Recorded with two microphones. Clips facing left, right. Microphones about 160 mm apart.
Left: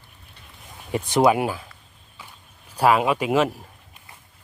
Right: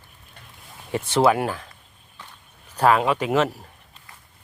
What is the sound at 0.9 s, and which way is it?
Speech, 15° left (ahead or behind).